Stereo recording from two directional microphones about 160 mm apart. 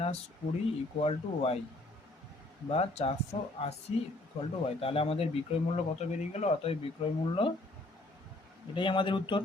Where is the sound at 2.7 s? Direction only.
40° left (ahead or behind).